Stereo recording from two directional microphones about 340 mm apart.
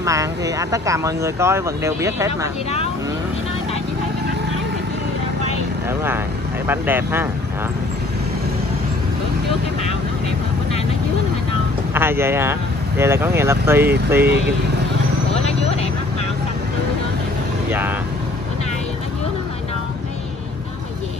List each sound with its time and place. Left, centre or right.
0.0 s speech: centre
5.9 s speech: centre
11.9 s speech: centre
15.3 s a sound: centre
17.6 s speech: centre